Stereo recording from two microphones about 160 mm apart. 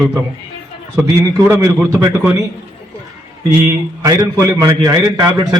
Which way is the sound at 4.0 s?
20° right (ahead or behind).